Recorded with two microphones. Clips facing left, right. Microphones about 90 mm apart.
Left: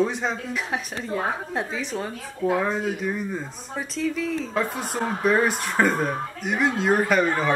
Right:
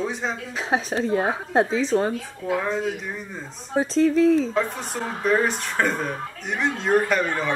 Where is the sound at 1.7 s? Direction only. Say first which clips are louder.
Right 8 dB; 75° right (ahead or behind).